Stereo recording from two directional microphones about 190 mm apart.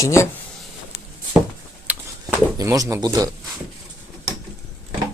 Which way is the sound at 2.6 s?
20° right (ahead or behind).